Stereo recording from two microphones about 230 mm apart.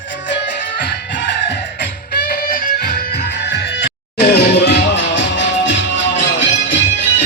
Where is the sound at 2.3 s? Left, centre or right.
Left.